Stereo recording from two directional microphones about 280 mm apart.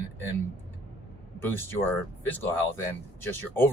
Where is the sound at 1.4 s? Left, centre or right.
Centre.